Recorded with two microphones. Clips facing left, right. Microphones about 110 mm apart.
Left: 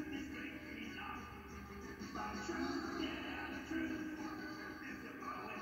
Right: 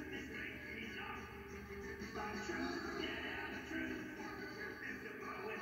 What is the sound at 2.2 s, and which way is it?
Music, 20° left (ahead or behind).